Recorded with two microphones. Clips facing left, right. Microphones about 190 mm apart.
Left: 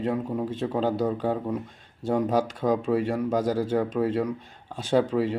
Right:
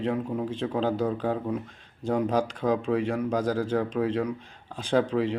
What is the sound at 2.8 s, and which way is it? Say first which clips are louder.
Speech: left 1 dB; 5° left (ahead or behind).